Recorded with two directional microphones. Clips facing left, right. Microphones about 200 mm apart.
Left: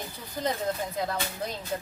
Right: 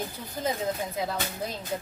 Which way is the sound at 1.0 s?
5° right (ahead or behind).